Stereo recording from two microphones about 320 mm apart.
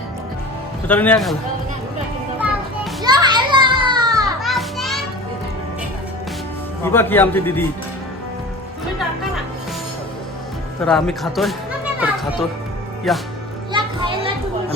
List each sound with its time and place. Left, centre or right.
0.9 s speech: centre
2.4 s children playing: centre
4.4 s children playing: centre
6.8 s a man's voice: centre
10.8 s speech: centre
13.1 s speech: centre
13.7 s children playing: centre